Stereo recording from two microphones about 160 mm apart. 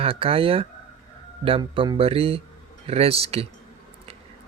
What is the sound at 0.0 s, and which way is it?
Speech, 35° right (ahead or behind).